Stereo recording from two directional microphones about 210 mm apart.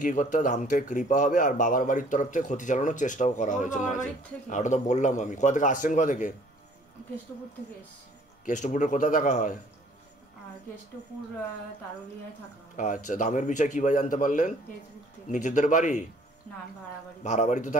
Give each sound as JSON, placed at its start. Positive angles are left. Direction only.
{"t": 0.0, "sound": "speech", "side_deg": 35}
{"t": 8.5, "sound": "speech", "side_deg": 35}
{"t": 12.7, "sound": "speech", "side_deg": 35}
{"t": 17.2, "sound": "speech", "side_deg": 35}